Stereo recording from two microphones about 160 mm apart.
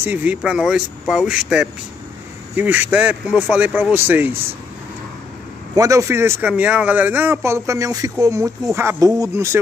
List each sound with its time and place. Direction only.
0.0 s speech: 10° right (ahead or behind)
5.8 s speech: 20° right (ahead or behind)